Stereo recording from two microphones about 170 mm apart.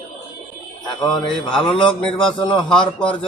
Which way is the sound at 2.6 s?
5° left (ahead or behind).